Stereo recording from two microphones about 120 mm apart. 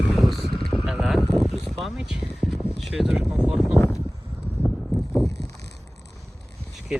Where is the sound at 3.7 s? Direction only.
15° left (ahead or behind).